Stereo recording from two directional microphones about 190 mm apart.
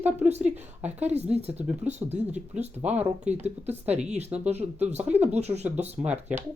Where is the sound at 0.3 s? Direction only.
35° right (ahead or behind).